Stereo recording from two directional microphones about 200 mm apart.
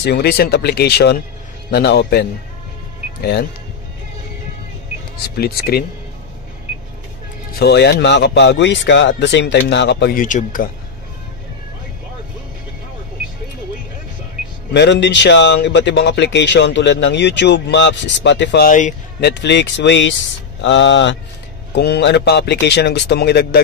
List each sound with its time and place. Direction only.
0.0 s speech: 55° left (ahead or behind)
5.4 s speech: 50° left (ahead or behind)
7.5 s speech: 55° left (ahead or behind)
10.2 s speech: 40° left (ahead or behind)
14.7 s speech: 60° left (ahead or behind)
18.7 s speech: 40° left (ahead or behind)
19.3 s speech: 60° left (ahead or behind)